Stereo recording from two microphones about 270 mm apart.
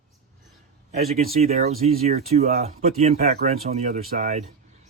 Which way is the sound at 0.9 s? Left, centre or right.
Right.